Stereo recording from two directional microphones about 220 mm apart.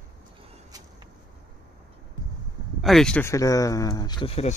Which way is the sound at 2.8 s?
Centre (ahead or behind).